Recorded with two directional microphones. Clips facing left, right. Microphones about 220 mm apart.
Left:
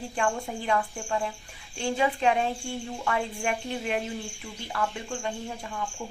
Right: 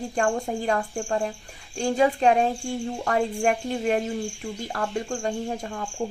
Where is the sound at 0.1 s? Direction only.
40° right (ahead or behind).